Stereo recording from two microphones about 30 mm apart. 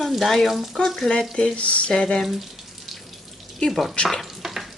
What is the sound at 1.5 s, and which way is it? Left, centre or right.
Speech, left.